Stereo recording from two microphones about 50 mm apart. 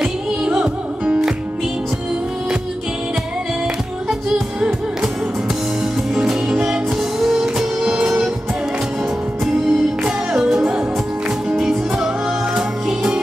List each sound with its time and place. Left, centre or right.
0.0 s music: centre
6.1 s music: centre
9.4 s music: centre